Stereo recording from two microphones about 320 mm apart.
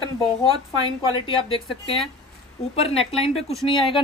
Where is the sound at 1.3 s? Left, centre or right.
Centre.